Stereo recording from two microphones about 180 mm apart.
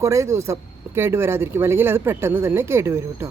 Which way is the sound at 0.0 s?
15° right (ahead or behind).